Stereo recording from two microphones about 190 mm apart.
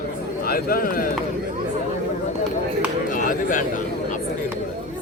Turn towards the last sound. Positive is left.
turn(degrees=45)  # may be behind; listen again after turning